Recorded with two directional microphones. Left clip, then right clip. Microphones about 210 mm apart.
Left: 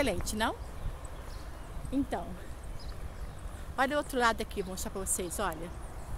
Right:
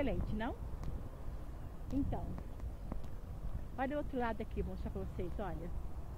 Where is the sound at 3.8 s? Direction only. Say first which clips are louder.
Left 9 dB; 20° left (ahead or behind).